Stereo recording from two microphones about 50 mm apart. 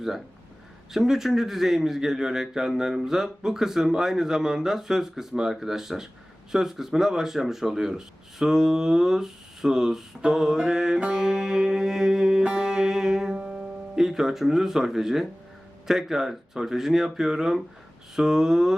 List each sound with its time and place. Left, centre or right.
0.9 s speech: centre
13.3 s music: right
13.9 s speech: centre